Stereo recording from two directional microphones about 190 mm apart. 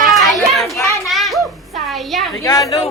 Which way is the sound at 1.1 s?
Centre (ahead or behind).